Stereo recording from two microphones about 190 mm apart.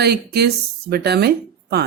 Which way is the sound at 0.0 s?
55° right (ahead or behind).